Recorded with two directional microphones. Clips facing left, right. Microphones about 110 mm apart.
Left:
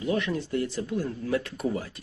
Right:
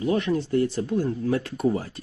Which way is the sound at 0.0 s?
30° right (ahead or behind).